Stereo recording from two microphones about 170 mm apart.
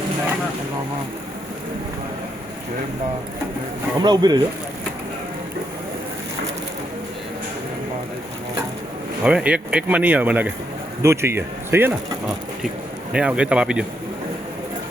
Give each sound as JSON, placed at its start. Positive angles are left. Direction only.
{"t": 4.0, "sound": "speech", "side_deg": -25}
{"t": 9.2, "sound": "speech", "side_deg": -5}
{"t": 13.1, "sound": "speech", "side_deg": -5}